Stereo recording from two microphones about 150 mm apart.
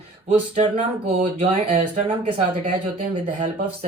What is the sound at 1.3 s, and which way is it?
Speech, 40° right (ahead or behind).